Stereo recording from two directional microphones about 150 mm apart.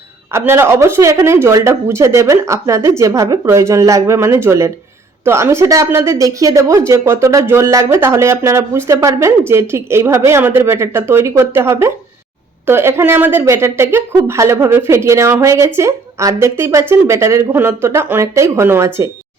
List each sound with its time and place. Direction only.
0.3 s a woman's voice: 15° right (ahead or behind)